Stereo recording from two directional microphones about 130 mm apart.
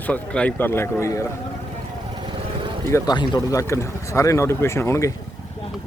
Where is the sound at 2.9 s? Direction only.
20° left (ahead or behind).